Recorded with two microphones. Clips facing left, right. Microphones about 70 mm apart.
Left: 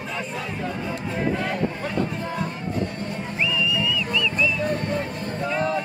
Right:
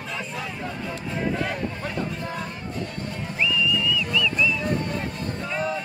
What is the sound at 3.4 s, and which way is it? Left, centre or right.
Music, centre.